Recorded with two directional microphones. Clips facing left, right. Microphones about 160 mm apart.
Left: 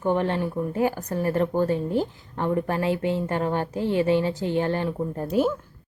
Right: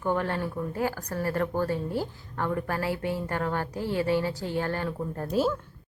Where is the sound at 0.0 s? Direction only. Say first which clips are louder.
Left 4 dB; 20° left (ahead or behind).